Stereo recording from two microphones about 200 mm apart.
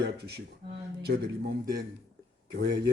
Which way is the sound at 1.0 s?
55° right (ahead or behind).